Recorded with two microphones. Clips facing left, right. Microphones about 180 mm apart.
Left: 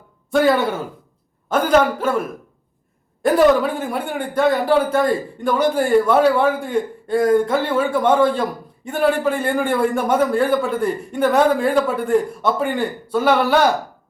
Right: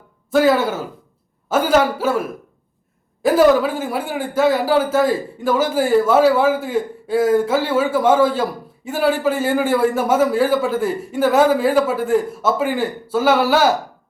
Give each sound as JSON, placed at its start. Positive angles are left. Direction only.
{"t": 0.3, "sound": "a man's voice", "side_deg": 0}
{"t": 3.2, "sound": "speech", "side_deg": 0}